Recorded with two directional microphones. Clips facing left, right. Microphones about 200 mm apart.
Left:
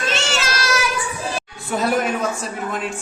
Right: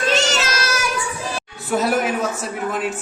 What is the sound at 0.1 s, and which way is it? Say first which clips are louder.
Child singing: right 4 dB; 40° right (ahead or behind).